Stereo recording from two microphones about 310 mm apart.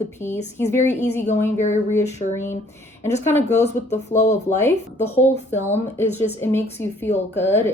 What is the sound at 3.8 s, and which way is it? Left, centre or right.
Speech, left.